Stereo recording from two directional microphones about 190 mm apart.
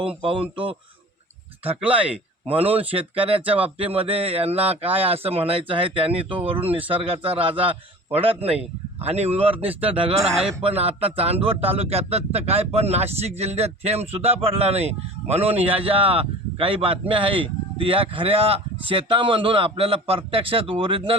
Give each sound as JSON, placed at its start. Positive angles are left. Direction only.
{"t": 0.2, "sound": "speech", "side_deg": -30}
{"t": 1.6, "sound": "speech", "side_deg": -5}
{"t": 2.0, "sound": "a man's voice", "side_deg": -30}